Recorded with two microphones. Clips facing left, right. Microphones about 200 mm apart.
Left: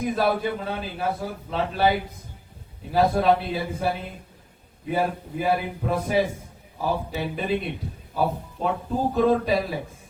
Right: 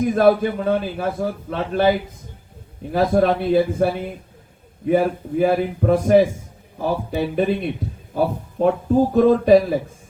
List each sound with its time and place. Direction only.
0.0 s a man's voice: 50° right (ahead or behind)